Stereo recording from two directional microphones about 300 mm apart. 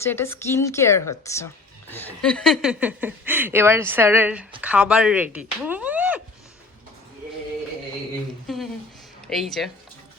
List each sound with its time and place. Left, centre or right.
0.0 s speech: centre
8.5 s a sound: centre
9.2 s speech: centre